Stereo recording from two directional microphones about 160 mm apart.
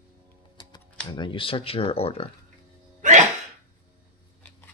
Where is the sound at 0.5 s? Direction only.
30° left (ahead or behind).